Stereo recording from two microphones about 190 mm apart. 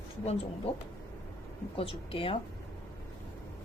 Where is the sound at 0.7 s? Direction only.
35° left (ahead or behind).